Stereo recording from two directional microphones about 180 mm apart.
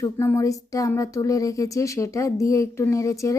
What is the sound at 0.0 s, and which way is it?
Speech, 15° left (ahead or behind).